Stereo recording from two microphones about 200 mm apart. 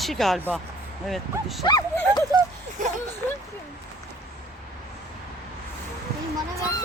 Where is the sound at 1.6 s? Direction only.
20° left (ahead or behind).